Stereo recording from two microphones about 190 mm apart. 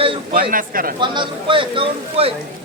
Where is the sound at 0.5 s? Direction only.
50° right (ahead or behind).